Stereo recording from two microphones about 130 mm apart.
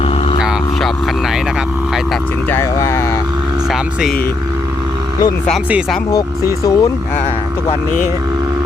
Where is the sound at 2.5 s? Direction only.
20° left (ahead or behind).